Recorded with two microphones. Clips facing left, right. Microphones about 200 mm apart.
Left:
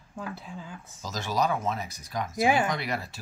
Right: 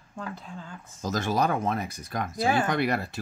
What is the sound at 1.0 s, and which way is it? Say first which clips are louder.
Speech: right 2 dB; 55° right (ahead or behind).